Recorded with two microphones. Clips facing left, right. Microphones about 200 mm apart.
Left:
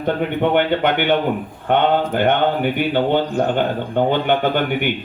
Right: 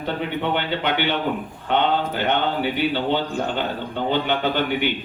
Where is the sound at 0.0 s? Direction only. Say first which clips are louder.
Left 6 dB; 50° left (ahead or behind).